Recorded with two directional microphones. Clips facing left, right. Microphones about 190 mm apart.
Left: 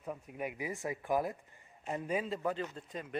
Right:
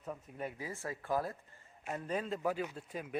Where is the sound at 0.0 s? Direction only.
10° left (ahead or behind).